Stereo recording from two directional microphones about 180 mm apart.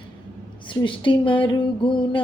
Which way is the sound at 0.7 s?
30° left (ahead or behind).